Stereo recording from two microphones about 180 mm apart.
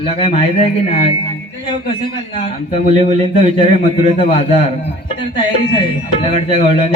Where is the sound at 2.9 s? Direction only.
40° right (ahead or behind).